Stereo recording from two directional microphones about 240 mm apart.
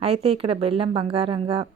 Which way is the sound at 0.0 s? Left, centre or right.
Right.